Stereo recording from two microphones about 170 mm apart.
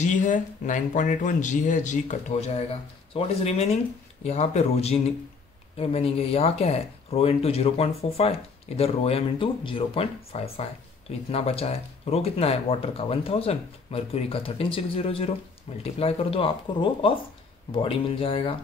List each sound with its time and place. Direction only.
0.0 s speech: 45° left (ahead or behind); by 18.6 s 30° left (ahead or behind)